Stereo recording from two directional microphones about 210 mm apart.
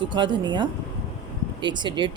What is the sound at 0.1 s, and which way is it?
Speech, 20° right (ahead or behind).